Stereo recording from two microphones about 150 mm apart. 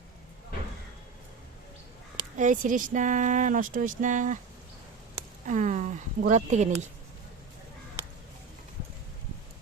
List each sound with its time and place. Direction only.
2.3 s speech: 60° right (ahead or behind)
5.5 s speech: 55° right (ahead or behind)